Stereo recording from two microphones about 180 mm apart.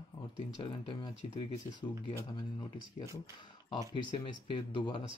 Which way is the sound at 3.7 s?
25° left (ahead or behind).